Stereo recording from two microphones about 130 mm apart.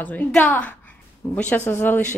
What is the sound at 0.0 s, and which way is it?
Speech, 10° left (ahead or behind).